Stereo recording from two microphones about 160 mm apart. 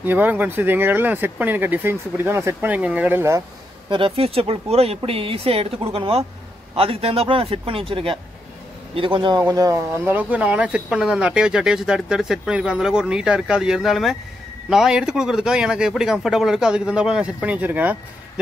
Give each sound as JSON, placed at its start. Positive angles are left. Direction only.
{"t": 0.0, "sound": "speech", "side_deg": -10}
{"t": 3.9, "sound": "speech", "side_deg": -35}